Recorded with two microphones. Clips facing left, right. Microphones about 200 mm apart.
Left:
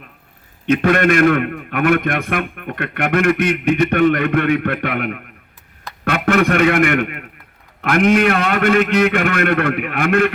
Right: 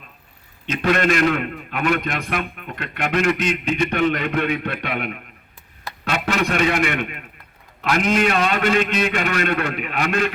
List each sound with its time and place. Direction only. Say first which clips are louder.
0.7 s a man's voice: left 5 dB; 55° left (ahead or behind)